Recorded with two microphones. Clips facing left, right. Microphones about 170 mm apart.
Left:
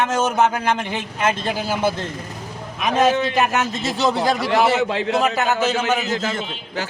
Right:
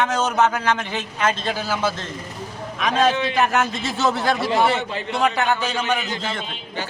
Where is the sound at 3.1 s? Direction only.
45° left (ahead or behind).